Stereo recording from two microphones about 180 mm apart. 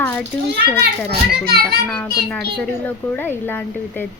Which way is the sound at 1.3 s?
60° right (ahead or behind).